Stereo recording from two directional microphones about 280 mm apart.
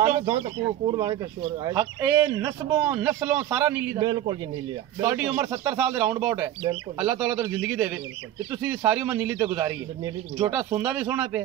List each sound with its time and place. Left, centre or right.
0.0 s speech: centre
6.6 s speech: centre
7.1 s speech: centre